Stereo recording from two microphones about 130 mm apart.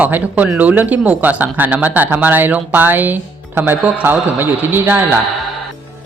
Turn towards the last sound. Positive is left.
turn(degrees=-15)  # may be behind; listen again after turning